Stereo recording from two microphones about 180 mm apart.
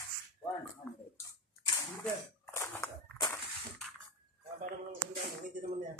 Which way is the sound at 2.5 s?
15° left (ahead or behind).